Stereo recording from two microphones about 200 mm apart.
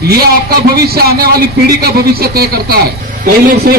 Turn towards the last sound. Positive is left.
turn(degrees=-50)  # may be behind; listen again after turning